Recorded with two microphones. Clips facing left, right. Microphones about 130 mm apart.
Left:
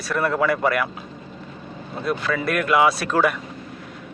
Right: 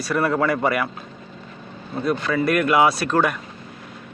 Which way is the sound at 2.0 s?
Centre (ahead or behind).